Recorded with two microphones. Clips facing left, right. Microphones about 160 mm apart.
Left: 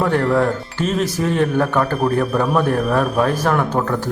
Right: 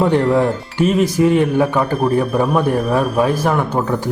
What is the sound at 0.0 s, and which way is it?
A man's voice, 15° right (ahead or behind).